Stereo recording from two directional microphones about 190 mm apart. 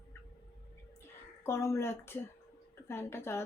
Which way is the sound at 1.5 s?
15° left (ahead or behind).